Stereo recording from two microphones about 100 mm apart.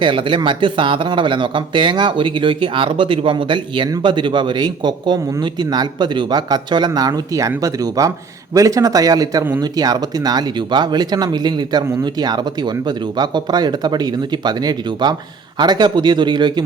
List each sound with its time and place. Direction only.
0.0 s speech: 60° right (ahead or behind)